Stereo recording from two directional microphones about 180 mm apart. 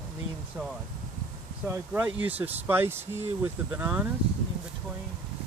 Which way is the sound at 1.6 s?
10° right (ahead or behind).